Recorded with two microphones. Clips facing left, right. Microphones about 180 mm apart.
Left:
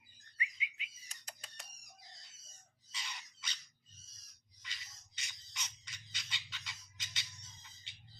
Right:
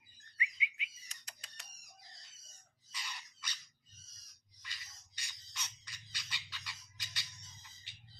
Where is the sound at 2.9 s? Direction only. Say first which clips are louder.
Even; 20° left (ahead or behind).